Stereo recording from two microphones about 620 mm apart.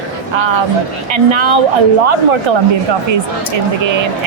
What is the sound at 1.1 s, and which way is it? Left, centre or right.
Speech, right.